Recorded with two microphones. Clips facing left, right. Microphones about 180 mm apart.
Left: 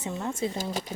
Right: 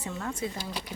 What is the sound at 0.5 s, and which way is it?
Speech, 45° left (ahead or behind).